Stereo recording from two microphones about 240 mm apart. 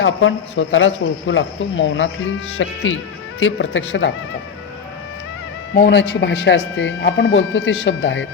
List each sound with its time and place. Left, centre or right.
0.0 s speech: left
5.7 s speech: left